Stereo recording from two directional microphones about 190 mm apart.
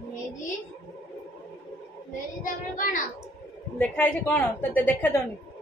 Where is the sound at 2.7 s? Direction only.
45° left (ahead or behind).